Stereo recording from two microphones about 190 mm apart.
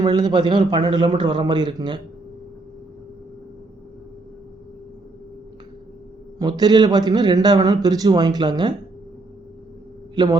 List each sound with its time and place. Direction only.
0.0 s a man's voice: 25° right (ahead or behind)
6.4 s a man's voice: 20° right (ahead or behind)
10.2 s a man's voice: 20° right (ahead or behind)